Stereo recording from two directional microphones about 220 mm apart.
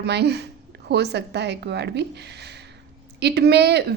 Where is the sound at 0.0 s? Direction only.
50° right (ahead or behind).